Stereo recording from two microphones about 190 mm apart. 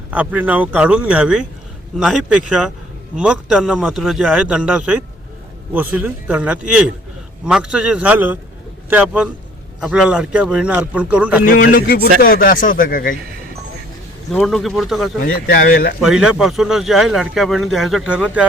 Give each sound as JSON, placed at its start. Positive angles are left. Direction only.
{"t": 0.1, "sound": "a man's voice", "side_deg": -5}
{"t": 11.4, "sound": "speech", "side_deg": 50}
{"t": 14.3, "sound": "a man's voice", "side_deg": 0}
{"t": 15.2, "sound": "speech", "side_deg": 50}
{"t": 16.0, "sound": "a man's voice", "side_deg": -5}